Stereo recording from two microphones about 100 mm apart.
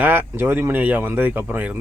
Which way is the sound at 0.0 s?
20° right (ahead or behind).